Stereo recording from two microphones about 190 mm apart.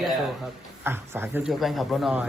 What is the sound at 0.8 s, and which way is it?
Speech, 10° right (ahead or behind).